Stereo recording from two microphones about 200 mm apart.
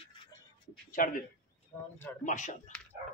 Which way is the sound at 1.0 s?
45° left (ahead or behind).